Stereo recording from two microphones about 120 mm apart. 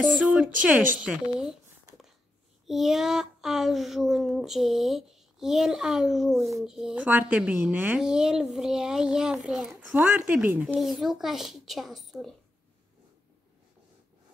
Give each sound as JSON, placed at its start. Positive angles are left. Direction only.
{"t": 0.1, "sound": "speech", "side_deg": -10}
{"t": 2.6, "sound": "speech", "side_deg": 0}
{"t": 10.8, "sound": "speech", "side_deg": 0}